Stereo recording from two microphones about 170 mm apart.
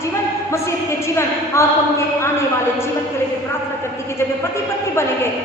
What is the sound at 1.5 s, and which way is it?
Speech, 15° left (ahead or behind).